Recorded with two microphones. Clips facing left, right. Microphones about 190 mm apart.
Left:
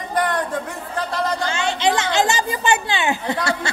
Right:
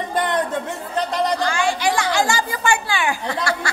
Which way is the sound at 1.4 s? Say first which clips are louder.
Even; 25° left (ahead or behind).